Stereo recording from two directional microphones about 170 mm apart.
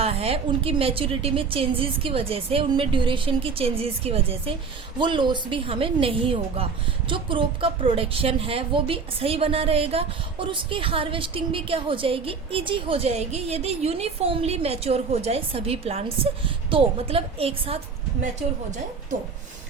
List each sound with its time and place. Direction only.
0.0 s a woman's voice: 35° right (ahead or behind)